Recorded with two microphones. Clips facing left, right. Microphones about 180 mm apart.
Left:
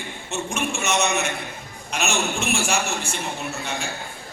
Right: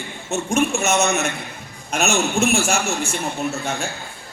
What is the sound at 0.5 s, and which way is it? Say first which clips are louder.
A man's voice: right 6 dB; 45° right (ahead or behind).